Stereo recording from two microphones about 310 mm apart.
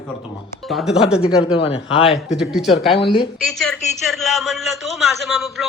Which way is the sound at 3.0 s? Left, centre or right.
Centre.